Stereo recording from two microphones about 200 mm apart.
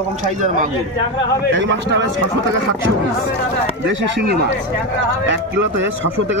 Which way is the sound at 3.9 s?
65° right (ahead or behind).